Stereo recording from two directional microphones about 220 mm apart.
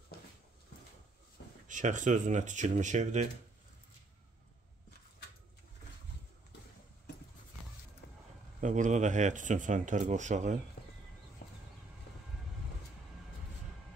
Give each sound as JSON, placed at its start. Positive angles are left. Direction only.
{"t": 1.7, "sound": "speech", "side_deg": -35}
{"t": 8.5, "sound": "speech", "side_deg": -35}